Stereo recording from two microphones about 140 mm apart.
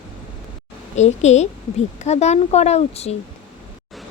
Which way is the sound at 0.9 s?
55° left (ahead or behind).